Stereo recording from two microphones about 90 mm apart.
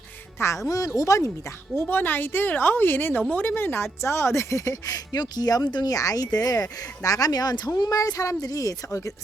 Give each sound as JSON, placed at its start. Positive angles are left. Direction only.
{"t": 0.3, "sound": "a woman's voice", "side_deg": 30}
{"t": 1.7, "sound": "a woman's voice", "side_deg": 20}